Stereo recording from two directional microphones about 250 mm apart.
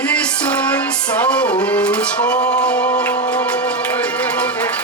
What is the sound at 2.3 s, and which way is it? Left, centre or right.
Music, left.